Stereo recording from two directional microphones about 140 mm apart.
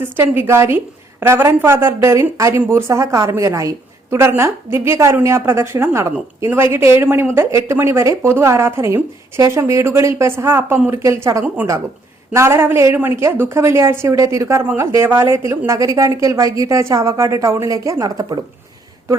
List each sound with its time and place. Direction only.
0.0 s a woman's voice: 15° right (ahead or behind)